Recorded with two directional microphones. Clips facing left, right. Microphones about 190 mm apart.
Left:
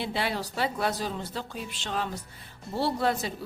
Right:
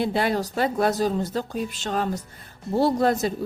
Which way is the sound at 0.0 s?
45° right (ahead or behind).